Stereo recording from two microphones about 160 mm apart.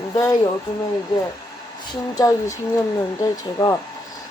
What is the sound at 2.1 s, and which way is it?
Speech, 20° left (ahead or behind).